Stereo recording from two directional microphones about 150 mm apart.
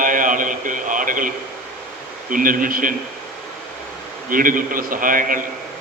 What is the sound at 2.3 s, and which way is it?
Speech, 65° right (ahead or behind).